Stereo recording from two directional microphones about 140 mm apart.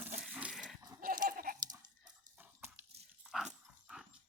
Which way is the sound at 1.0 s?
90° right.